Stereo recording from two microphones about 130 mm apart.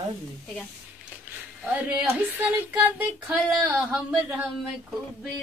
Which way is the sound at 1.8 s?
10° right (ahead or behind).